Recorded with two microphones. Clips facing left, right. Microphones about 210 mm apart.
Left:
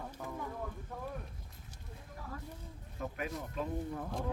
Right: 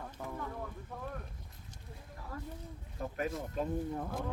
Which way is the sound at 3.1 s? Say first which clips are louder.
Right 5 dB; 40° right (ahead or behind).